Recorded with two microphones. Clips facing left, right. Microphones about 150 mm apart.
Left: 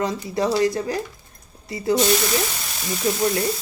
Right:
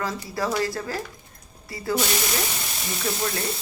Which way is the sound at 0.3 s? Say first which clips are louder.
Left 6 dB; 20° left (ahead or behind).